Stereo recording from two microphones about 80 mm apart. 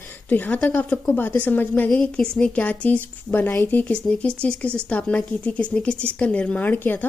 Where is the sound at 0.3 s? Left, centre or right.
Centre.